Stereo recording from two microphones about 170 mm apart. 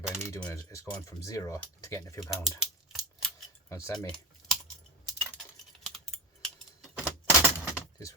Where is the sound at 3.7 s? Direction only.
25° left (ahead or behind).